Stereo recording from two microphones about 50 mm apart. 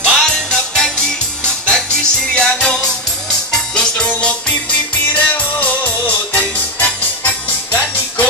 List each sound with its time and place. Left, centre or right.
0.1 s music: centre; by 8.3 s left